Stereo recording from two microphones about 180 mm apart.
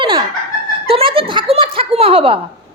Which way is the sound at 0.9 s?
30° right (ahead or behind).